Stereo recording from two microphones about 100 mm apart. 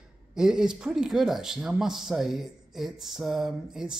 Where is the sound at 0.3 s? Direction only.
5° right (ahead or behind).